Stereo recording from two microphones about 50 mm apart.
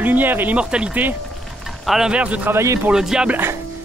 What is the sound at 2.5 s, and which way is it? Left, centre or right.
Speech, right.